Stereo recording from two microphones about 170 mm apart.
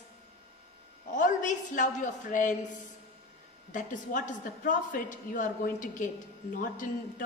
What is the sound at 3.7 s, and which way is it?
A woman's voice, 50° left (ahead or behind).